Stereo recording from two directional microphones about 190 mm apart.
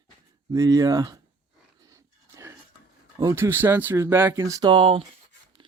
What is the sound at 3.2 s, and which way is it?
Speech, 15° right (ahead or behind).